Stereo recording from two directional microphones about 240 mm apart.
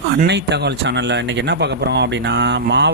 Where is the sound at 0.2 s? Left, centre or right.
Right.